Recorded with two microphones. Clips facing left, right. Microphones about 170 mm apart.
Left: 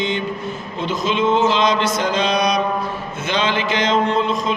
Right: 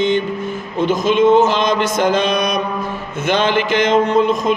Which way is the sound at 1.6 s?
50° right (ahead or behind).